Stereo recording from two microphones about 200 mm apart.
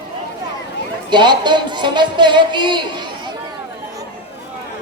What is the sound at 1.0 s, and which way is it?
Speech, 20° right (ahead or behind).